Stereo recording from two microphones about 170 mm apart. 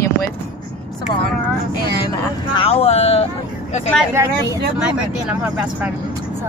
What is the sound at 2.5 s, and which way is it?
Speech, 35° left (ahead or behind).